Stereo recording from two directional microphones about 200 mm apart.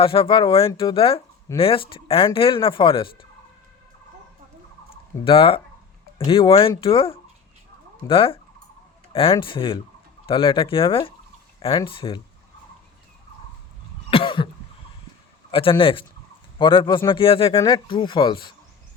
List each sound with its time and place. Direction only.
0.0 s speech: 25° left (ahead or behind)
5.2 s speech: 25° left (ahead or behind)
14.1 s cough: 25° left (ahead or behind)
15.5 s speech: 25° left (ahead or behind)